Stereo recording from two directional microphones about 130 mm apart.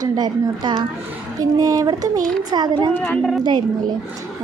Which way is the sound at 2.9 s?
10° left (ahead or behind).